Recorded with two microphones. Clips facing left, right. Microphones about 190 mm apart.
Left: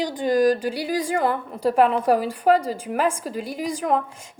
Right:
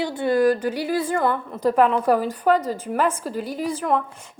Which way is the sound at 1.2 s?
35° left (ahead or behind).